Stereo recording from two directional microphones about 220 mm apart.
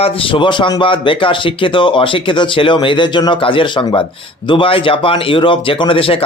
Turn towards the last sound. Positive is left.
turn(degrees=25)  # may be behind; listen again after turning